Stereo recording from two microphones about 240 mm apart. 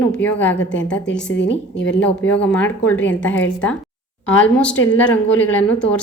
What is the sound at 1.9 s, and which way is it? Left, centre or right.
A woman's voice, centre.